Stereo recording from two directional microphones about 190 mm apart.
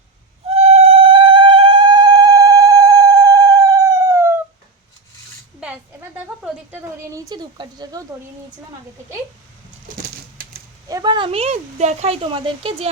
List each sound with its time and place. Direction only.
0.5 s cat: 35° right (ahead or behind); by 4.4 s 15° right (ahead or behind)
5.5 s a sound: 10° right (ahead or behind)
10.8 s speech: 20° right (ahead or behind)